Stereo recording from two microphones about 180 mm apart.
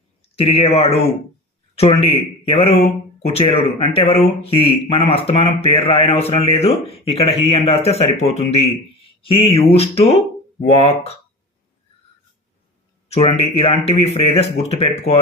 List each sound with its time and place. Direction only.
0.2 s speech: 35° left (ahead or behind)
13.1 s speech: 35° left (ahead or behind)